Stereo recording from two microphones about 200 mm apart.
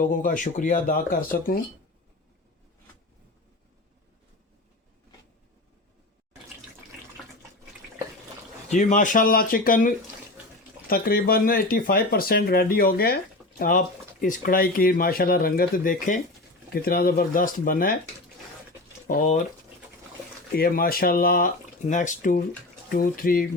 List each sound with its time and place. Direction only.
0.0 s speech: 40° left (ahead or behind)
8.7 s speech: 40° left (ahead or behind)
19.0 s speech: 40° left (ahead or behind)
20.6 s speech: 45° left (ahead or behind)